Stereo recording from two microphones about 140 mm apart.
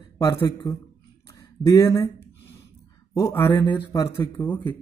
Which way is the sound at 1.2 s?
25° left (ahead or behind).